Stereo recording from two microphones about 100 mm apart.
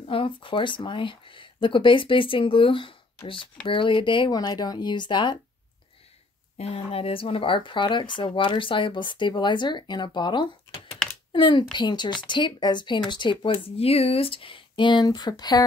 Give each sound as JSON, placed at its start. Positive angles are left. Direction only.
{"t": 0.0, "sound": "speech", "side_deg": 65}
{"t": 4.3, "sound": "speech", "side_deg": 40}
{"t": 6.6, "sound": "speech", "side_deg": 80}
{"t": 13.5, "sound": "speech", "side_deg": 75}